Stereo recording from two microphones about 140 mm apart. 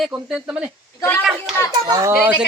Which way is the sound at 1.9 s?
25° right (ahead or behind).